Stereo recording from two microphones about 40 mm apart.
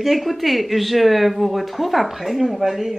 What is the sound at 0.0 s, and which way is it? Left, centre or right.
Speech, centre.